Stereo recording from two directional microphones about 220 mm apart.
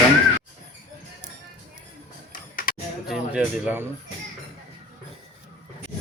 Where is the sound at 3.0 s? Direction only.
Centre (ahead or behind).